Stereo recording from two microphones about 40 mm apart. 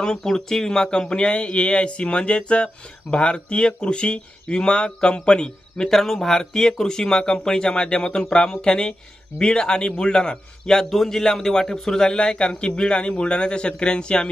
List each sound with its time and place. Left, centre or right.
0.2 s speech: centre